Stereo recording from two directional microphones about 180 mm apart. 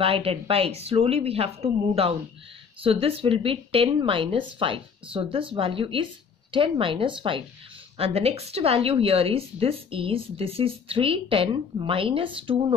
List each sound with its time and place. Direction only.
0.0 s a woman's voice: 30° right (ahead or behind)